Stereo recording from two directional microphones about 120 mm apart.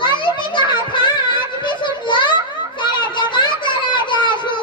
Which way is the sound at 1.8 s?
40° left (ahead or behind).